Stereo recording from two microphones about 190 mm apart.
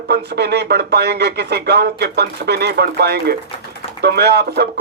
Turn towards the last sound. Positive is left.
turn(degrees=-60)  # may be behind; listen again after turning